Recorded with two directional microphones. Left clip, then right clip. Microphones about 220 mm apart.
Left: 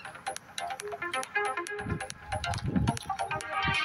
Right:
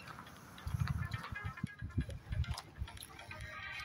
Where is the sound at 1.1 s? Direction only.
45° left (ahead or behind).